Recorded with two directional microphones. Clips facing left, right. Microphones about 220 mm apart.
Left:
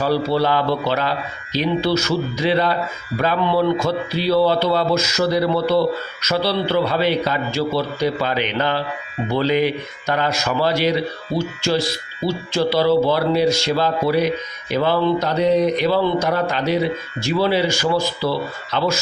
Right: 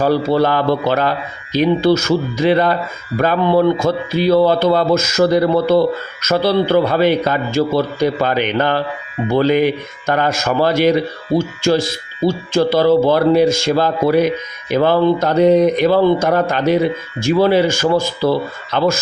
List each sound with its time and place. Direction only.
0.0 s speech: 45° right (ahead or behind)